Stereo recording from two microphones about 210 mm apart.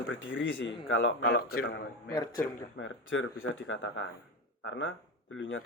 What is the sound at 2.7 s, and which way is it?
Speech, 65° left (ahead or behind).